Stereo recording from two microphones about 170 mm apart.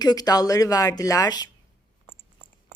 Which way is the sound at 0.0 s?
25° left (ahead or behind).